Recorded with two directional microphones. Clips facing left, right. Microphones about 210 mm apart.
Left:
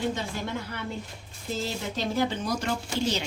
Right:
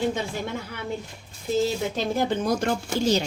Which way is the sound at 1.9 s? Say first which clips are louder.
Right 3 dB; 50° right (ahead or behind).